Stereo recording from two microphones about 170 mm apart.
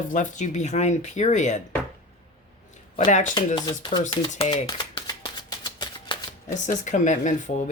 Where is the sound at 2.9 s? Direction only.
45° left (ahead or behind).